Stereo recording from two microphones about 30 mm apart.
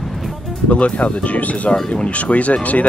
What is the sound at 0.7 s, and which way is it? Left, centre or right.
Speech, left.